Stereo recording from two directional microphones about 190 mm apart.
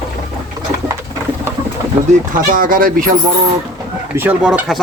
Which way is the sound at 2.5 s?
45° right (ahead or behind).